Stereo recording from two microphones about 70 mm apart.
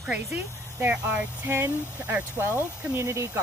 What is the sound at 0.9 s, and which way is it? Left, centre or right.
Speech, centre.